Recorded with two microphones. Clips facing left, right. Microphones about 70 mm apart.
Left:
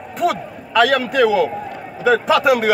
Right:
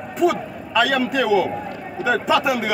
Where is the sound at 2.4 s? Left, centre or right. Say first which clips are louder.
Left 6 dB; left.